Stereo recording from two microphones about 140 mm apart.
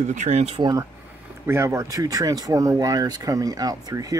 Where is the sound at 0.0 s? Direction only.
60° right (ahead or behind).